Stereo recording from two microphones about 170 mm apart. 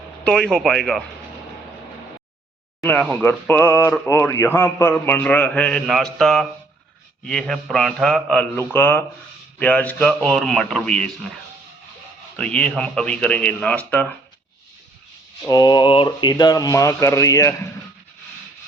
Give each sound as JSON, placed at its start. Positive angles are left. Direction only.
{"t": 0.3, "sound": "a man's voice", "side_deg": 5}
{"t": 2.8, "sound": "a man's voice", "side_deg": 5}
{"t": 12.4, "sound": "speech", "side_deg": 5}
{"t": 15.4, "sound": "speech", "side_deg": 25}